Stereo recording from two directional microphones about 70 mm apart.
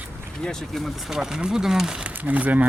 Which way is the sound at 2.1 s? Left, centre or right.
Right.